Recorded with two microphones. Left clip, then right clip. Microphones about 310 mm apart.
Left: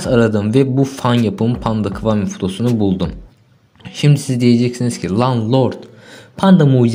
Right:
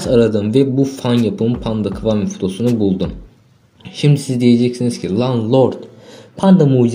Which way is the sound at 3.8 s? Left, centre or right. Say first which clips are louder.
Right 1 dB; centre.